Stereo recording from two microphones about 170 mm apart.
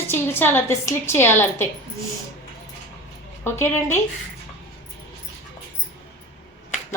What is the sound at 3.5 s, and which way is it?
Speech, 15° left (ahead or behind).